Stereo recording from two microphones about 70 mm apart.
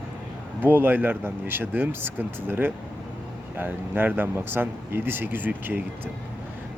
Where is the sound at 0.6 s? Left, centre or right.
Right.